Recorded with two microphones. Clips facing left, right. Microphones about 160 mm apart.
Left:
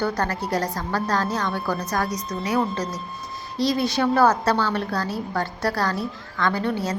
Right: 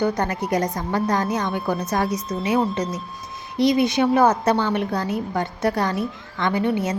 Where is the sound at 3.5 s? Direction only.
20° right (ahead or behind).